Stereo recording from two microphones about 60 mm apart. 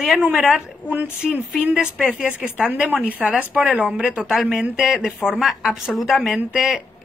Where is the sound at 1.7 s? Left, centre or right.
Centre.